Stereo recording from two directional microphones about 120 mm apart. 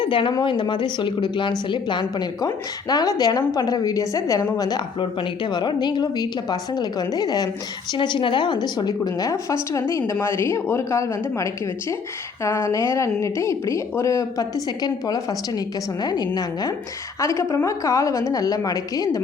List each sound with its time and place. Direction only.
0.0 s a woman's voice: 45° left (ahead or behind)